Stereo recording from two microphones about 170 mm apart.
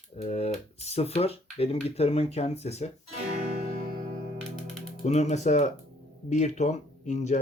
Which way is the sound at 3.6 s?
55° right (ahead or behind).